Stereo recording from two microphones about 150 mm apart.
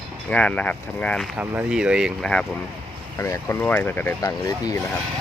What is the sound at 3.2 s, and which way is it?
Speech, 20° left (ahead or behind).